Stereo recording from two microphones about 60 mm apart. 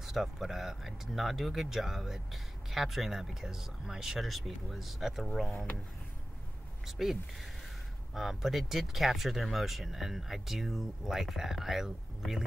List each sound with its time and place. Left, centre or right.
0.0 s speech: centre
6.9 s speech: centre
8.1 s speech: centre